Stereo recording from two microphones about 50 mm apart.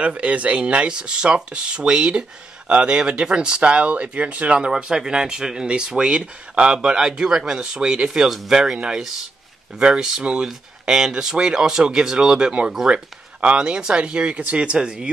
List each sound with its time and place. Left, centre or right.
0.0 s speech: right